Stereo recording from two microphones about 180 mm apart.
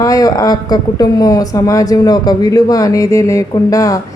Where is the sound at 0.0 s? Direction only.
20° left (ahead or behind).